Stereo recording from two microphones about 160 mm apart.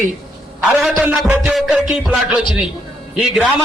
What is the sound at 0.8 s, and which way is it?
Music, 10° right (ahead or behind).